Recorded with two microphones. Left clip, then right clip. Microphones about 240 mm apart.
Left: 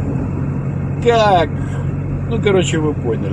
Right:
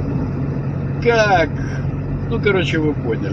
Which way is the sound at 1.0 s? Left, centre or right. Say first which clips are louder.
Left 2 dB; centre.